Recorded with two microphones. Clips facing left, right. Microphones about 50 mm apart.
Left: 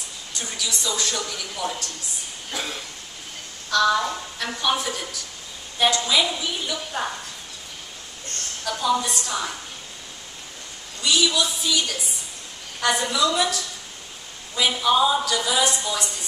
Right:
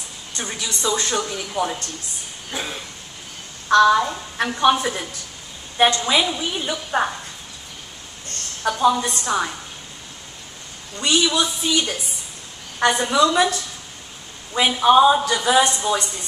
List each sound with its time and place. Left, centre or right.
0.4 s speech: right
2.5 s a sound: centre
3.6 s speech: right
8.6 s speech: right
11.0 s speech: right
14.8 s speech: right